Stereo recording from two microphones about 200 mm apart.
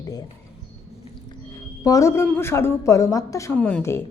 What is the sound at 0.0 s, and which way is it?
Speech, 20° left (ahead or behind).